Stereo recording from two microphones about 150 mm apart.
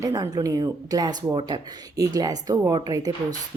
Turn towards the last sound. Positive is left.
turn(degrees=-25)  # may be behind; listen again after turning